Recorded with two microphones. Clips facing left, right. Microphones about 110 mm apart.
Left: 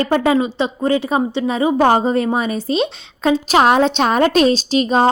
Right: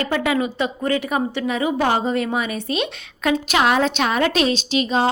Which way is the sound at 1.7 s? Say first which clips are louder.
Left 8 dB; 40° left (ahead or behind).